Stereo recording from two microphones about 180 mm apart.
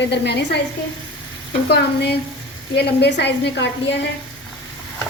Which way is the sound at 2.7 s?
70° left (ahead or behind).